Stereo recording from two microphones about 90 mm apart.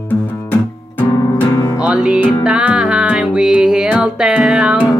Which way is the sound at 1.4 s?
45° left (ahead or behind).